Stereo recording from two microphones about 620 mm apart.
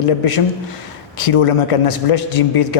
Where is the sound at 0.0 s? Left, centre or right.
Left.